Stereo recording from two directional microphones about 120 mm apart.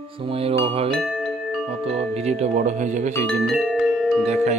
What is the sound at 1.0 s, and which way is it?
Music, centre (ahead or behind).